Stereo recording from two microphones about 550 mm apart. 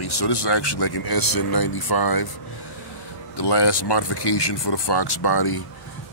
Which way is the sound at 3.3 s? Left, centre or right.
Left.